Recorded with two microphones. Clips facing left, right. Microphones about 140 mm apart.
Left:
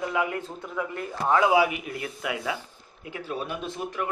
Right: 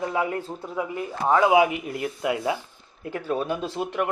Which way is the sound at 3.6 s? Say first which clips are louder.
Right 5 dB; 75° right (ahead or behind).